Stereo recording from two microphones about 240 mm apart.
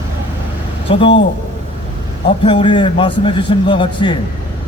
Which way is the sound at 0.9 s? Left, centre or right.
Left.